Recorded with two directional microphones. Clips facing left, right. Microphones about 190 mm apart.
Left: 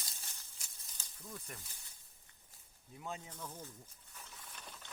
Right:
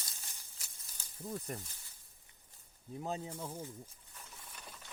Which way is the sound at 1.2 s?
35° right (ahead or behind).